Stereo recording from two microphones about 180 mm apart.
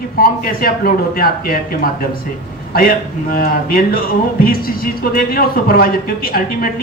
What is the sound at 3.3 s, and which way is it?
A man's voice, 55° left (ahead or behind).